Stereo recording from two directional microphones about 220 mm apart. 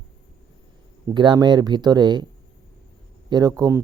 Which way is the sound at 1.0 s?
20° right (ahead or behind).